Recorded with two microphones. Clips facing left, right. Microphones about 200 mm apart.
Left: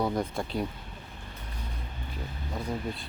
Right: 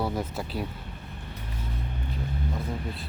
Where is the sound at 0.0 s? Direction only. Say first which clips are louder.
Left 1 dB; 5° right (ahead or behind).